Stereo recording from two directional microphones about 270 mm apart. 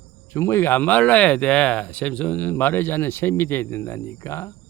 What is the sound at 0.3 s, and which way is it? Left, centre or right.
Speech, centre.